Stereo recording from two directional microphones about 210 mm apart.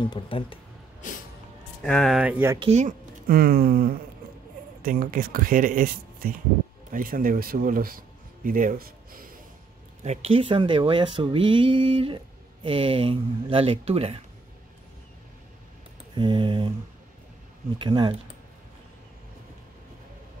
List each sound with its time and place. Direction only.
0.1 s speech: 25° left (ahead or behind)
1.8 s speech: 5° left (ahead or behind)
2.6 s speech: 35° right (ahead or behind)
10.0 s speech: 30° right (ahead or behind)
16.2 s speech: 20° right (ahead or behind)
17.7 s speech: 20° right (ahead or behind)